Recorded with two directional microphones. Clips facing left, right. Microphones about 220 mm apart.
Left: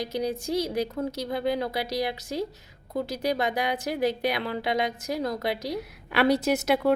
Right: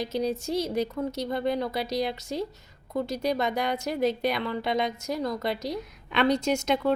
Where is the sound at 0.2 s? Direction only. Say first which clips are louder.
Right 1 dB; 15° left (ahead or behind).